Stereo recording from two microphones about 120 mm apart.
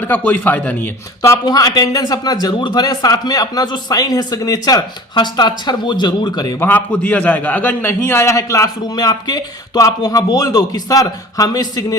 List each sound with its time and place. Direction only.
0.0 s speech: 15° left (ahead or behind)
1.2 s a man's voice: 30° left (ahead or behind)
6.7 s a man's voice: 15° left (ahead or behind); by 11.9 s 30° left (ahead or behind)